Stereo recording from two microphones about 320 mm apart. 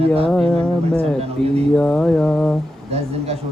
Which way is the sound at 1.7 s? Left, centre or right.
Centre.